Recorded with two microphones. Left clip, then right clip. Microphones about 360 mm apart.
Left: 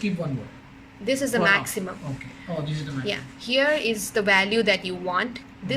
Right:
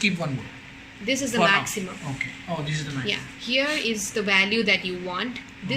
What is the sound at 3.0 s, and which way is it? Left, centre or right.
A woman's voice, left.